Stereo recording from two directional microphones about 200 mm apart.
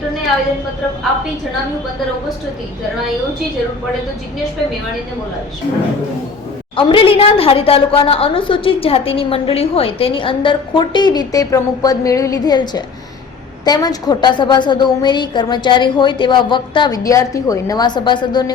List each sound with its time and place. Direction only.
6.7 s a woman's voice: 25° left (ahead or behind)